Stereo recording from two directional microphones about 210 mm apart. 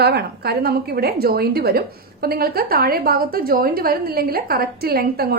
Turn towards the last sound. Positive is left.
turn(degrees=-45)  # may be behind; listen again after turning